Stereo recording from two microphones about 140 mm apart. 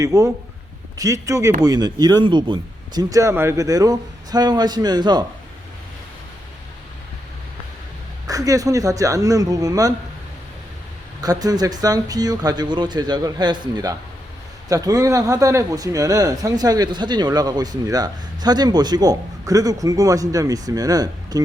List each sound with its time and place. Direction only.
0.0 s speech: 20° right (ahead or behind)
8.3 s speech: 25° right (ahead or behind)
11.2 s speech: 25° right (ahead or behind)